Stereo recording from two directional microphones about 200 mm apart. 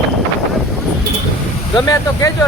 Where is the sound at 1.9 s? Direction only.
15° left (ahead or behind).